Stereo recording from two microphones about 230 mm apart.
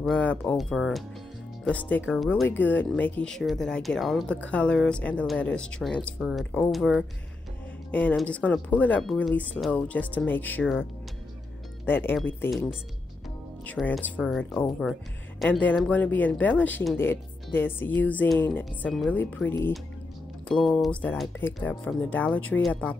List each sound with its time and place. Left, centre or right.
0.0 s speech: centre